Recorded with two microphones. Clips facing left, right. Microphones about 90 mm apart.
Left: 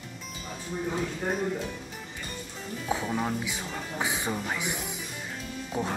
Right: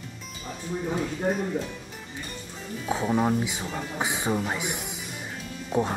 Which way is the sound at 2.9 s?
15° right (ahead or behind).